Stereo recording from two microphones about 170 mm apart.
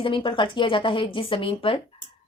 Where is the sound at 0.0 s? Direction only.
30° left (ahead or behind).